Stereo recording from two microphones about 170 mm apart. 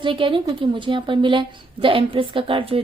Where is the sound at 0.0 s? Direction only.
30° right (ahead or behind).